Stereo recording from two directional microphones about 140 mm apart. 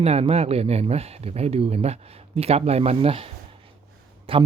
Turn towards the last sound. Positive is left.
turn(degrees=-40)  # may be behind; listen again after turning